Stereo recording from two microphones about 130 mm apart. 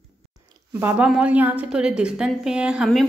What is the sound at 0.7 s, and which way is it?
Speech, 15° right (ahead or behind).